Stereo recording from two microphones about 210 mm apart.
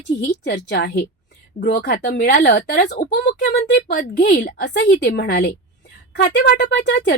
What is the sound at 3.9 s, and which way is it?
A woman's voice, 40° left (ahead or behind).